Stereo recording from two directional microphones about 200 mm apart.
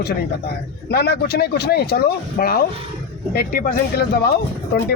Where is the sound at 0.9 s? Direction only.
55° left (ahead or behind).